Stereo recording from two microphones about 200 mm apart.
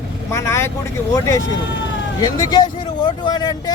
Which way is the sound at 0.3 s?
15° left (ahead or behind).